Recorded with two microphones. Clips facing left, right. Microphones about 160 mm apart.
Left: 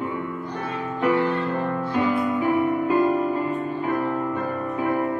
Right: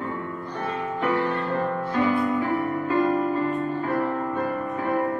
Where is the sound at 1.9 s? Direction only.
15° left (ahead or behind).